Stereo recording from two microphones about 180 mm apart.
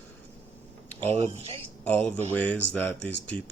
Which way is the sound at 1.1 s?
35° right (ahead or behind).